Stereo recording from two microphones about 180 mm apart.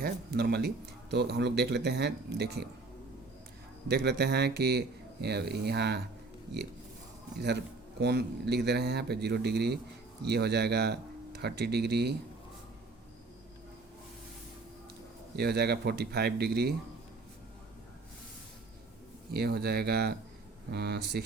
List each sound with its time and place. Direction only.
0.0 s speech: 60° right (ahead or behind)
3.8 s speech: 65° right (ahead or behind)
7.3 s speech: 65° right (ahead or behind)
15.4 s speech: 65° right (ahead or behind)
19.3 s speech: 60° right (ahead or behind)